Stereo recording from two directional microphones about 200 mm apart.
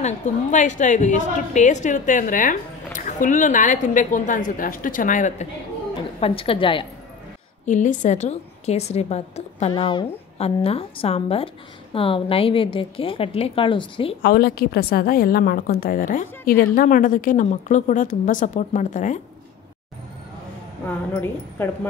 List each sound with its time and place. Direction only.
0.0 s a woman's voice: 40° left (ahead or behind)
6.1 s a woman's voice: 30° left (ahead or behind)
7.6 s a woman's voice: 40° left (ahead or behind)
14.2 s a woman's voice: 50° left (ahead or behind)
20.8 s a woman's voice: 10° left (ahead or behind)